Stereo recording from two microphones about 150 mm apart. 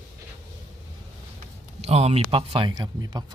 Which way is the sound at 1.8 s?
45° right (ahead or behind).